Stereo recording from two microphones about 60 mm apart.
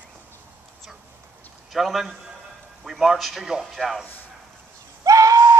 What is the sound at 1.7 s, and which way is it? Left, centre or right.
A man's voice, centre.